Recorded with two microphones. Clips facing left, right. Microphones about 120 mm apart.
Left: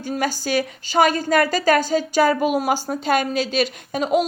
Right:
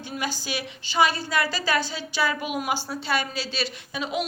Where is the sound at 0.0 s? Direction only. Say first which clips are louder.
Left 8 dB; 45° left (ahead or behind).